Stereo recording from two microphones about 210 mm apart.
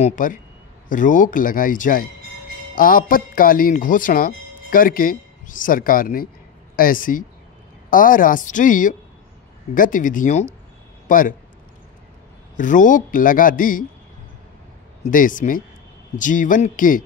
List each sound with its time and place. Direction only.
0.0 s speech: 40° left (ahead or behind)
12.5 s speech: 40° left (ahead or behind)
15.0 s speech: 40° left (ahead or behind)